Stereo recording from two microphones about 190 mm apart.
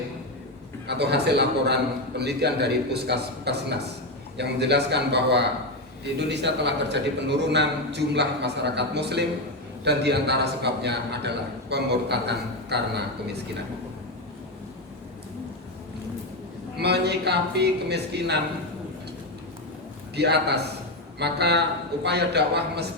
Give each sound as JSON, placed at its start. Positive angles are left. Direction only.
{"t": 0.9, "sound": "a man's voice", "side_deg": -60}
{"t": 16.8, "sound": "a man's voice", "side_deg": -60}
{"t": 20.1, "sound": "a man's voice", "side_deg": -60}